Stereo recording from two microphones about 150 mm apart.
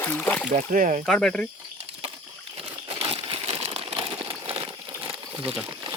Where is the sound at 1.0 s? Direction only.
5° left (ahead or behind).